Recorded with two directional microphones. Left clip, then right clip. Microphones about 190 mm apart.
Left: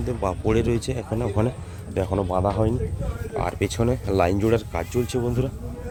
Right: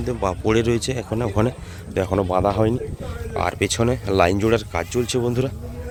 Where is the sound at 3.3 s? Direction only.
Centre (ahead or behind).